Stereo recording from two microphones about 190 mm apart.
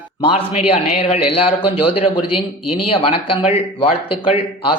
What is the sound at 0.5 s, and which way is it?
A woman's voice, 35° left (ahead or behind).